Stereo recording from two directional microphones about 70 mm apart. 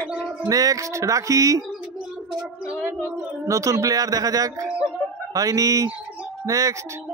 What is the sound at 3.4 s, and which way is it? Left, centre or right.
Speech, right.